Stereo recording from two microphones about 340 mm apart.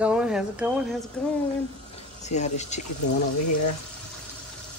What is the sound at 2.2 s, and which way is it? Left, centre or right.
Speech, centre.